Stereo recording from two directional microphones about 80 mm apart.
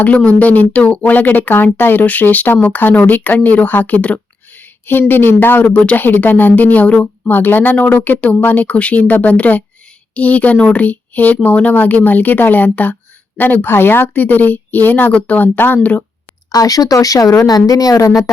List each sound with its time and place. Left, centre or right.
0.0 s speech: centre
16.5 s speech: left